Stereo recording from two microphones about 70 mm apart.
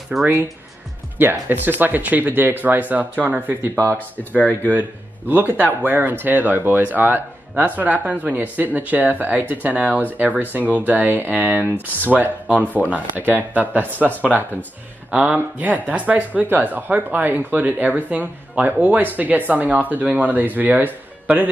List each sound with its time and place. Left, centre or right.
0.1 s speech: centre
1.1 s speech: right
4.2 s speech: left
5.3 s speech: right